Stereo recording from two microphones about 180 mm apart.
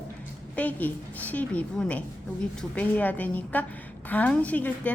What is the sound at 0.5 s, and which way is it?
A woman's voice, 10° left (ahead or behind).